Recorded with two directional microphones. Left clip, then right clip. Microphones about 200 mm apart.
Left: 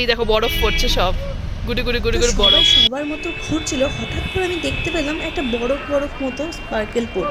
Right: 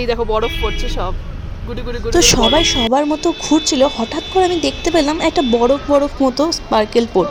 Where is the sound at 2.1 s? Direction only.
35° right (ahead or behind).